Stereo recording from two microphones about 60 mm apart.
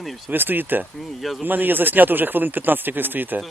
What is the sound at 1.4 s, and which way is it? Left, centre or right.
Speech, right.